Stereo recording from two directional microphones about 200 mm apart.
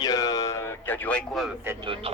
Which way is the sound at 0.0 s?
20° left (ahead or behind).